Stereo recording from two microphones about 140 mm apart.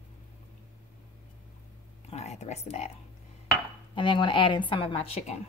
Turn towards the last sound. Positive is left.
turn(degrees=50)  # may be behind; listen again after turning